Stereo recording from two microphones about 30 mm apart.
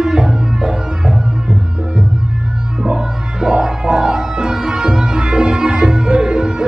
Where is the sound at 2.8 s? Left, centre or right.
Right.